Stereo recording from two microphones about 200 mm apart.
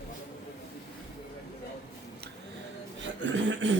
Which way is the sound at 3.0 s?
65° right (ahead or behind).